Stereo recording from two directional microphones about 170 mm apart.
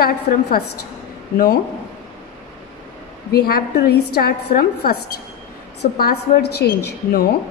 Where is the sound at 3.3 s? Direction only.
65° left (ahead or behind).